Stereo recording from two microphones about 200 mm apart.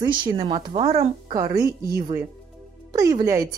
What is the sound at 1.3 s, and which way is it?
Speech, 15° right (ahead or behind).